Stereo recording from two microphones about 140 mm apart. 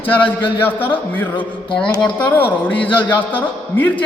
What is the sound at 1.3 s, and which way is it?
Speech, 35° left (ahead or behind).